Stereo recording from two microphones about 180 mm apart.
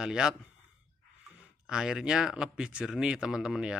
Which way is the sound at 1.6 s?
5° right (ahead or behind).